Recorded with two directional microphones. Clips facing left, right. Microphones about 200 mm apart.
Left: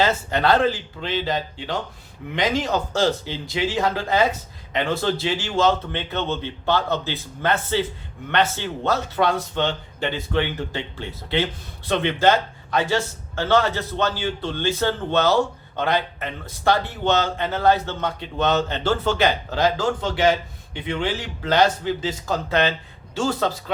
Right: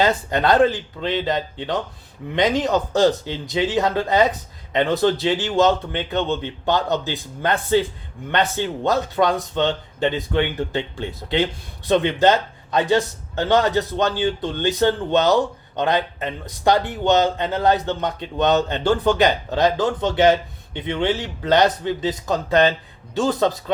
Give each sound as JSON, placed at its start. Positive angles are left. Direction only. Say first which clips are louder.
{"t": 0.0, "sound": "a man's voice", "louder": "right 2 dB", "side_deg": -15}